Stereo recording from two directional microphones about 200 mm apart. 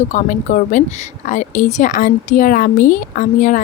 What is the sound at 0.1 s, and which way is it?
Speech, 40° left (ahead or behind).